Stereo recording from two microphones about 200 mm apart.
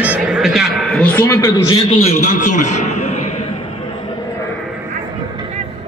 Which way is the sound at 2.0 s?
35° left (ahead or behind).